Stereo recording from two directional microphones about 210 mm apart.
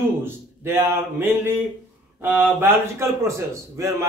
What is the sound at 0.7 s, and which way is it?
Speech, 10° right (ahead or behind).